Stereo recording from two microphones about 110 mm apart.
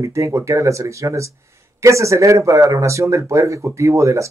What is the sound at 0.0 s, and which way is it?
Speech, 25° right (ahead or behind).